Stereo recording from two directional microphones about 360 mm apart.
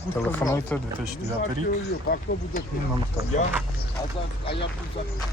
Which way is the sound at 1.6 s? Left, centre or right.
Left.